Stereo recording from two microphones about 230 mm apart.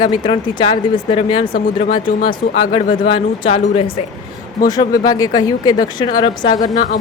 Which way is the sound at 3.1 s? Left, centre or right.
Left.